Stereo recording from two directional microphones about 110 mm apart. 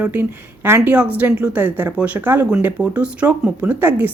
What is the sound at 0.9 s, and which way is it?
A woman's voice, 10° right (ahead or behind).